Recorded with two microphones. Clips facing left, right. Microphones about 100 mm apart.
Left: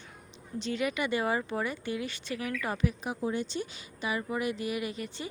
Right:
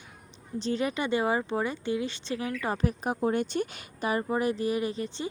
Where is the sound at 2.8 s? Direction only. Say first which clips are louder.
Right 5 dB; 45° right (ahead or behind).